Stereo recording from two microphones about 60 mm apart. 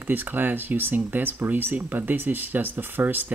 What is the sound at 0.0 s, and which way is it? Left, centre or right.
Speech, right.